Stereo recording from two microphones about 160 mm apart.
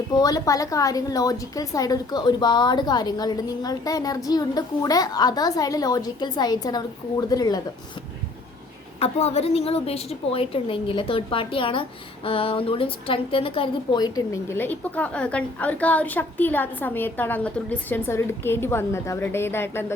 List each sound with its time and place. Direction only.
0.1 s a woman's voice: 25° left (ahead or behind)
9.0 s a woman's voice: 40° left (ahead or behind)
14.5 s a woman's voice: 10° left (ahead or behind)